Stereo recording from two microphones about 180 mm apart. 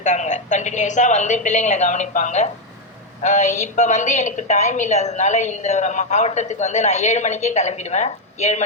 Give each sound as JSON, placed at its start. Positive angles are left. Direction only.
{"t": 0.0, "sound": "a woman's voice", "side_deg": 40}